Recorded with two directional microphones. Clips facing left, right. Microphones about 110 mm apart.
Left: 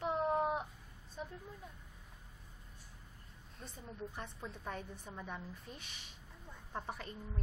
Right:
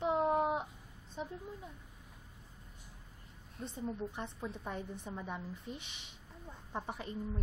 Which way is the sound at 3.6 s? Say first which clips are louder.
Right 8 dB; 15° right (ahead or behind).